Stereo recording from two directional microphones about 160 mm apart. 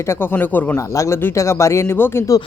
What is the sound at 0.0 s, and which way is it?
Speech, 15° left (ahead or behind).